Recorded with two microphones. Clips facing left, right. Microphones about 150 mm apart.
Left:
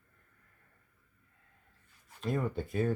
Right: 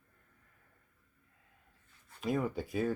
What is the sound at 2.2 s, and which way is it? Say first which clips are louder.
Speech: even; centre (ahead or behind).